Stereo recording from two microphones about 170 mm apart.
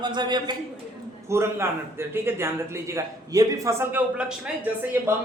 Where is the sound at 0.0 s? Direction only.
25° right (ahead or behind).